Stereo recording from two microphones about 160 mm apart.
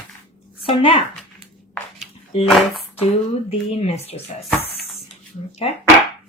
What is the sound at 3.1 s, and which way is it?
Speech, 40° left (ahead or behind).